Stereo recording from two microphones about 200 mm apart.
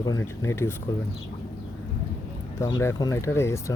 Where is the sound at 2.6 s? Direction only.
15° left (ahead or behind).